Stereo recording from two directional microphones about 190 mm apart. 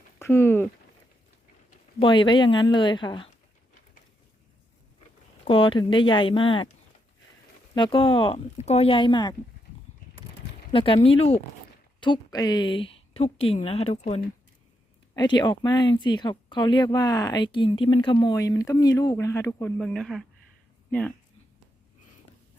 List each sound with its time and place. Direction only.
0.2 s speech: 10° left (ahead or behind)
2.0 s speech: 25° left (ahead or behind)
5.5 s speech: 25° left (ahead or behind)
7.8 s speech: 25° left (ahead or behind)
10.7 s speech: 30° left (ahead or behind)
15.1 s speech: 20° left (ahead or behind)
19.8 s speech: centre (ahead or behind)